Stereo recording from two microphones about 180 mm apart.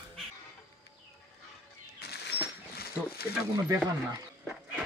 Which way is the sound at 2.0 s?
65° left (ahead or behind).